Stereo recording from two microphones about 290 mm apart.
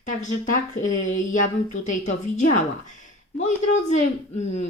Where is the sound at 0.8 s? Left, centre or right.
Left.